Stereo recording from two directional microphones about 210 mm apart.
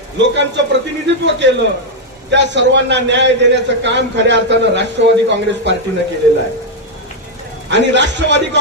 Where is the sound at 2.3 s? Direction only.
55° right (ahead or behind).